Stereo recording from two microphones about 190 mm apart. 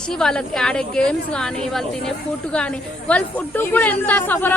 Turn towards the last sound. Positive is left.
turn(degrees=10)  # may be behind; listen again after turning